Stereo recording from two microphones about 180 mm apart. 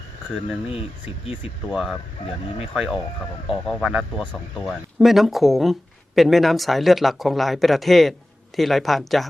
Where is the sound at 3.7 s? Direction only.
Centre (ahead or behind).